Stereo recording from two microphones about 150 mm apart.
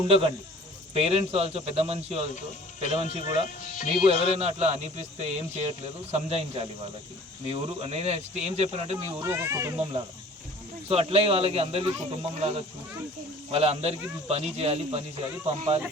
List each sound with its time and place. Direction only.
0.1 s a man's voice: 40° right (ahead or behind)
3.2 s speech: 60° left (ahead or behind)
3.8 s a man's voice: 35° right (ahead or behind)
9.0 s a child's voice: 15° right (ahead or behind)
10.8 s a man's voice: 40° right (ahead or behind)